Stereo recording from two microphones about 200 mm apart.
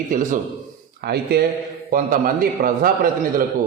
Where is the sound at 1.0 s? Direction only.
55° right (ahead or behind).